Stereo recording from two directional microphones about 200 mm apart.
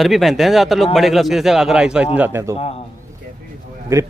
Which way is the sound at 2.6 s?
30° left (ahead or behind).